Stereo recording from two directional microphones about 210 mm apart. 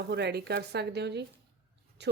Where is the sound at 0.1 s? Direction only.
50° right (ahead or behind).